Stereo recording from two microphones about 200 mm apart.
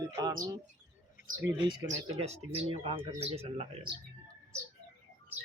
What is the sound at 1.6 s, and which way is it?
Speech, 20° right (ahead or behind).